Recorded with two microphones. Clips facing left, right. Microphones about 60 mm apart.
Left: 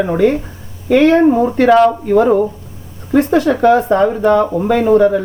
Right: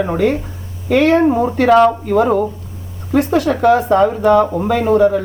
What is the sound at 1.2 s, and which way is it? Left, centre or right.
Speech, centre.